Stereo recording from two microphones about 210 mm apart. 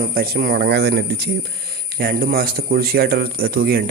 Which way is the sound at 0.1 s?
45° right (ahead or behind).